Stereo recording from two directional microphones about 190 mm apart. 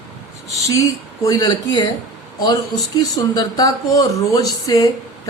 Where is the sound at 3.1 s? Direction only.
20° left (ahead or behind).